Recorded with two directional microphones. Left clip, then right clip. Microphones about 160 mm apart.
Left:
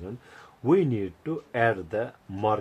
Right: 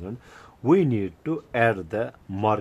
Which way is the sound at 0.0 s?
35° right (ahead or behind).